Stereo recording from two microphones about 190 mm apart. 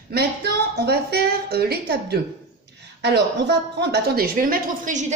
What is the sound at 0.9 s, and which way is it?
A woman's voice, 55° right (ahead or behind).